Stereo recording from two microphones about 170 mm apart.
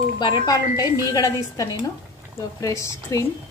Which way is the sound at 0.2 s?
25° left (ahead or behind).